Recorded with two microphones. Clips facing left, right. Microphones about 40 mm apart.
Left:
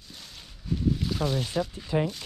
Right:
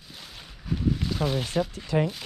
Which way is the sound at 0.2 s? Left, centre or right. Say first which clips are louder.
Right 2 dB; centre.